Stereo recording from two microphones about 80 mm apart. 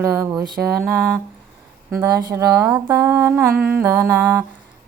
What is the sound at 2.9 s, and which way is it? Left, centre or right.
Speech, right.